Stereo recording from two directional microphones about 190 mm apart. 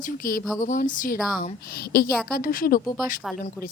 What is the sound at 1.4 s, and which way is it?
A woman's voice, 55° left (ahead or behind).